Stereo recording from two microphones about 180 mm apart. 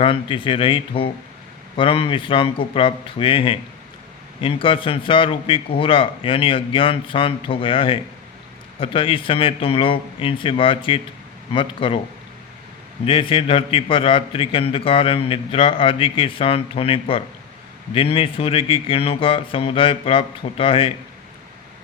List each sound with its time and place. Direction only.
0.0 s a man's voice: 30° left (ahead or behind)
13.1 s a man's voice: 30° left (ahead or behind)